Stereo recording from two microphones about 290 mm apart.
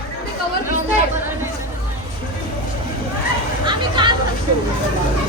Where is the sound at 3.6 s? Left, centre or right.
Centre.